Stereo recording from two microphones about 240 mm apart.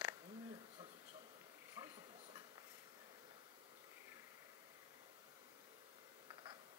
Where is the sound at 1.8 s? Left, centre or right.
Centre.